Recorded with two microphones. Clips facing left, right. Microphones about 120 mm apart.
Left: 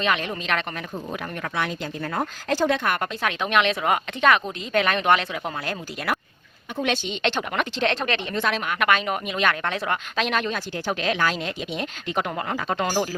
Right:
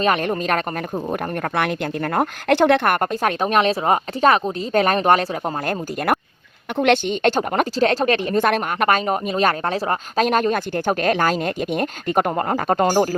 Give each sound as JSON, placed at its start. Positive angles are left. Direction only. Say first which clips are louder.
{"t": 0.0, "sound": "speech", "louder": "right 6 dB", "side_deg": -45}
{"t": 6.7, "sound": "speech", "louder": "right 8 dB", "side_deg": -65}